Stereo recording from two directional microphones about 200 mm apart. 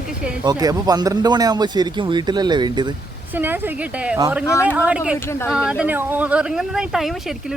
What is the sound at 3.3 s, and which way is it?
Speech, 10° right (ahead or behind).